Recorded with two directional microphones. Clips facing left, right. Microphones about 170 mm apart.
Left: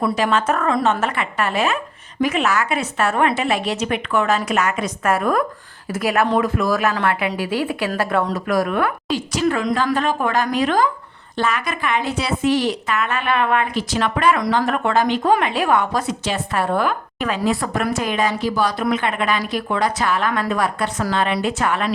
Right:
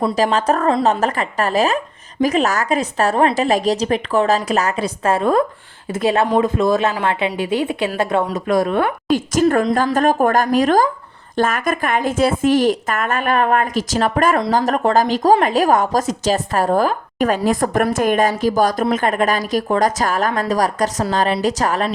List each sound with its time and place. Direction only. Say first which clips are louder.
0.2 s speech: right 3 dB; 35° right (ahead or behind)
9.0 s a woman's voice: right 5 dB; 50° right (ahead or behind)